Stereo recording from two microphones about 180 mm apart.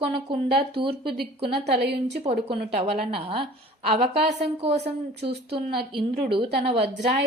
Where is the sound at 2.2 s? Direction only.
35° right (ahead or behind).